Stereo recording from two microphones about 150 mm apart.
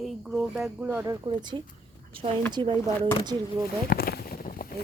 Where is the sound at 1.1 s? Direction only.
30° right (ahead or behind).